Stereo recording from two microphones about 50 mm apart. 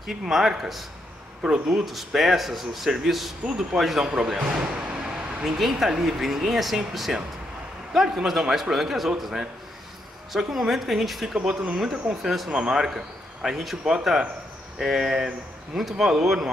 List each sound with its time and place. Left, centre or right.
0.2 s a man's voice: centre
1.9 s a man's voice: centre
4.0 s speech: right
4.3 s a sound: centre
5.6 s a man's voice: centre
10.3 s a man's voice: centre